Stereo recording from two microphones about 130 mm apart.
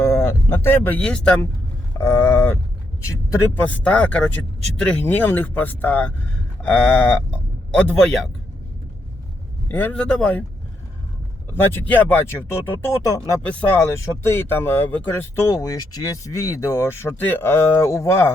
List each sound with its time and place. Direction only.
0.0 s a sound: 20° left (ahead or behind)
1.0 s speech: 5° left (ahead or behind)
2.0 s a sound: 15° left (ahead or behind)
3.5 s speech: 10° left (ahead or behind)
9.6 s speech: 15° left (ahead or behind)
11.7 s speech: 15° left (ahead or behind)
13.4 s speech: 10° left (ahead or behind)